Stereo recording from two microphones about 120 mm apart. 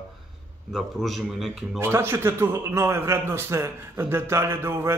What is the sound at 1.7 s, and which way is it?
A man's voice, 20° right (ahead or behind).